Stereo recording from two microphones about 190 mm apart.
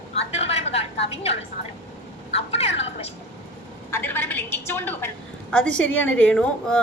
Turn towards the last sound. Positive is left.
turn(degrees=5)  # may be behind; listen again after turning